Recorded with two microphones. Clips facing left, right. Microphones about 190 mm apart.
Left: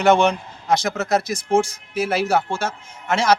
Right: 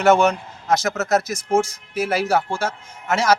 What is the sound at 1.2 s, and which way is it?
Speech, 30° left (ahead or behind).